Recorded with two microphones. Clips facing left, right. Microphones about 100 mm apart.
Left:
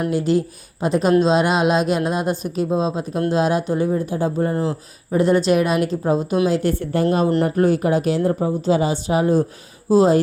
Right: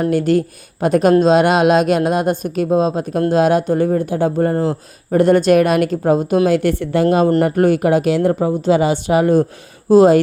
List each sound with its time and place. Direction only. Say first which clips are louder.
0.1 s speech: right 4 dB; 60° right (ahead or behind)
4.5 s speech: right 4 dB; 35° right (ahead or behind)
5.1 s speech: right 5 dB; 55° right (ahead or behind); by 7.3 s 90° right
7.4 s speech: right 3 dB; 75° right (ahead or behind)